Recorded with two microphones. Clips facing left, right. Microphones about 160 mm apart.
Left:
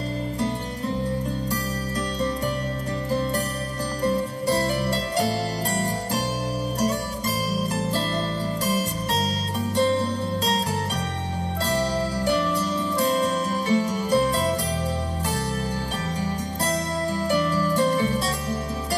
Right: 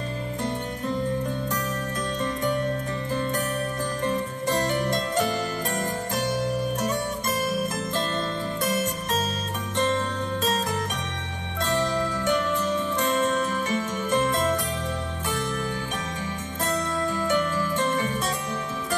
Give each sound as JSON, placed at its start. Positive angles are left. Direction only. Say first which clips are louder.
{"t": 3.1, "sound": "music", "louder": "left 2 dB", "side_deg": 35}
{"t": 9.8, "sound": "music", "louder": "left 3 dB", "side_deg": 35}
{"t": 11.7, "sound": "music", "louder": "even", "side_deg": 35}
{"t": 17.1, "sound": "music", "louder": "left 3 dB", "side_deg": 35}